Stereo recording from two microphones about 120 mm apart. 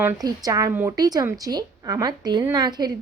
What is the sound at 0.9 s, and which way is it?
A woman's voice, 35° right (ahead or behind).